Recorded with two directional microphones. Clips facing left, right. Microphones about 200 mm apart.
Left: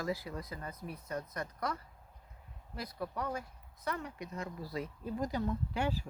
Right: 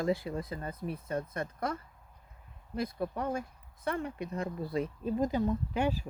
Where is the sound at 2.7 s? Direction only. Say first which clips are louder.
Right 6 dB; 25° right (ahead or behind).